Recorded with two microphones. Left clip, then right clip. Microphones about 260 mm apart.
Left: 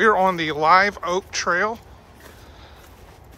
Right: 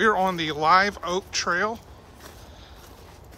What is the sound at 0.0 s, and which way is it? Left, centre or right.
Speech, centre.